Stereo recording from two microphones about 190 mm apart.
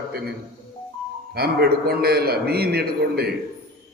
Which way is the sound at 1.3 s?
55° right (ahead or behind).